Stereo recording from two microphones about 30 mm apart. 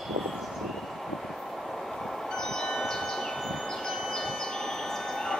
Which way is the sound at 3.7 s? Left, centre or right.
Centre.